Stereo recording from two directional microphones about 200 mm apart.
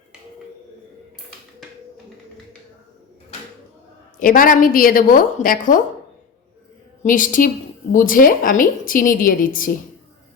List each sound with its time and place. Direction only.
4.2 s a woman's voice: 45° left (ahead or behind)
7.0 s a woman's voice: 40° left (ahead or behind)